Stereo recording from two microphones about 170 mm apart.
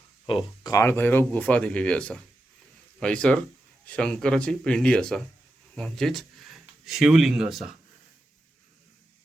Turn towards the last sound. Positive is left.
turn(degrees=-5)  # may be behind; listen again after turning